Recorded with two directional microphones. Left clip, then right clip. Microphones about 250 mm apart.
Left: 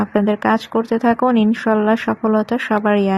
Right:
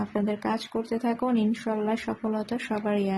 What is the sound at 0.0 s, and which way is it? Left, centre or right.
Speech, left.